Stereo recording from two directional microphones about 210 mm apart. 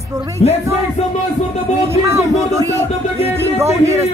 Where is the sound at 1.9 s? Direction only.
10° right (ahead or behind).